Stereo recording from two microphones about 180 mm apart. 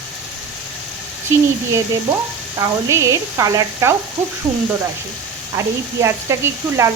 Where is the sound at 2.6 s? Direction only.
15° right (ahead or behind).